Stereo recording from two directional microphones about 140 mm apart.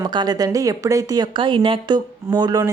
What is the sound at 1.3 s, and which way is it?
Speech, 35° right (ahead or behind).